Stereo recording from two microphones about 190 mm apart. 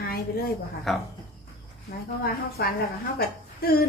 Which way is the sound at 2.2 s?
50° left (ahead or behind).